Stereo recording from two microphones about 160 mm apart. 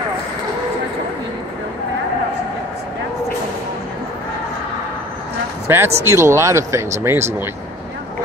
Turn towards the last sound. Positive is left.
turn(degrees=-15)  # may be behind; listen again after turning